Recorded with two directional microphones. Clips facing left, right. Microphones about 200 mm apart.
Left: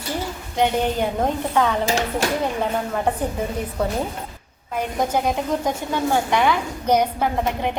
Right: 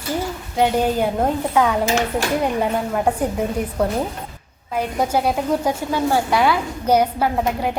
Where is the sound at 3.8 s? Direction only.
10° right (ahead or behind).